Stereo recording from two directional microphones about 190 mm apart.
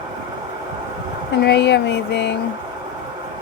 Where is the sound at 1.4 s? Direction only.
65° left (ahead or behind).